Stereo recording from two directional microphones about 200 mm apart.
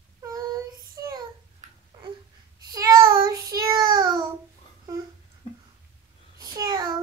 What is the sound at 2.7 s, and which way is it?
Child singing, 15° right (ahead or behind).